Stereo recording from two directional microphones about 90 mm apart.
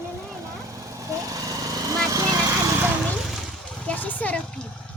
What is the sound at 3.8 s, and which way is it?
Speech, 20° left (ahead or behind).